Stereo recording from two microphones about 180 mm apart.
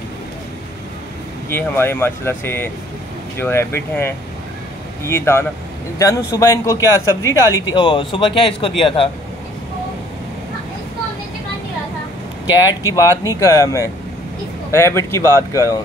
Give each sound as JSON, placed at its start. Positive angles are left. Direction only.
{"t": 1.5, "sound": "speech", "side_deg": 10}
{"t": 12.6, "sound": "speech", "side_deg": 20}